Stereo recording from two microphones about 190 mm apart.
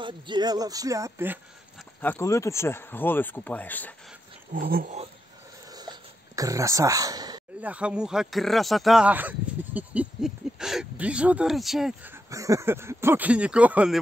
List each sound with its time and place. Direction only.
0.0 s speech: 25° right (ahead or behind)
2.0 s speech: 10° left (ahead or behind)
4.6 s dog: 50° right (ahead or behind)
5.7 s a sound: 20° right (ahead or behind)
7.6 s speech: 5° right (ahead or behind)